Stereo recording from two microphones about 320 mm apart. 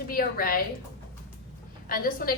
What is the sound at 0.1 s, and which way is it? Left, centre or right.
Speech, left.